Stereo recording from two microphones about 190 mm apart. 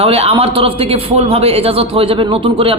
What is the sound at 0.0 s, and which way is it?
A man's voice, 30° right (ahead or behind).